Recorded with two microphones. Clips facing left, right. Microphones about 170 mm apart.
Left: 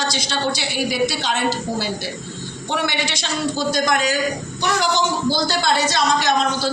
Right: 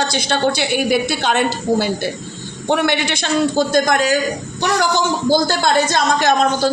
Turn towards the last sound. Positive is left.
turn(degrees=-50)  # may be behind; listen again after turning